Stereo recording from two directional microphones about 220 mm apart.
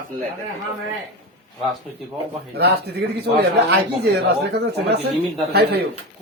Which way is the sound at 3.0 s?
50° right (ahead or behind).